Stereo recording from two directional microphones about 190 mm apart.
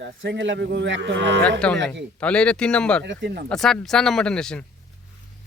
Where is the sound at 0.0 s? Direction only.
70° right (ahead or behind).